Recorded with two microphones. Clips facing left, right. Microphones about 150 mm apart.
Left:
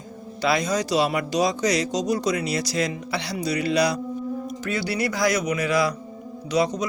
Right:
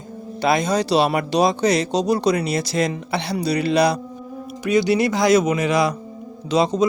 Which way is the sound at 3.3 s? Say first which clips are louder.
Right 4 dB; 30° right (ahead or behind).